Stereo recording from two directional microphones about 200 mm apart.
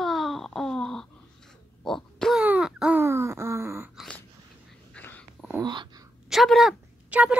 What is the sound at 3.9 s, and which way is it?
Dog, centre (ahead or behind).